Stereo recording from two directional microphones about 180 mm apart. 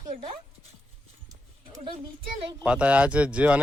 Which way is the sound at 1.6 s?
30° right (ahead or behind).